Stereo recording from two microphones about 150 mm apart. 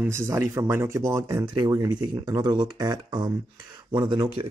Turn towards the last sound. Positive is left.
turn(degrees=-30)  # may be behind; listen again after turning